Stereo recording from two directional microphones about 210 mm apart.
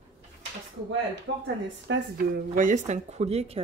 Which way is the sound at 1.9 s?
45° right (ahead or behind).